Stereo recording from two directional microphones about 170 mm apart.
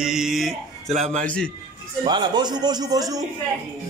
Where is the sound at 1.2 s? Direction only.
5° left (ahead or behind).